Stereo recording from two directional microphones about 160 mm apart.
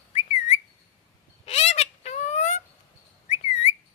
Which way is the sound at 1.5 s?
40° left (ahead or behind).